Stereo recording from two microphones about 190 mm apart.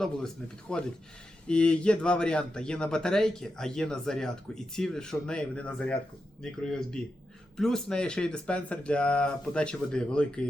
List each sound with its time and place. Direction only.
0.7 s a man's voice: 5° left (ahead or behind)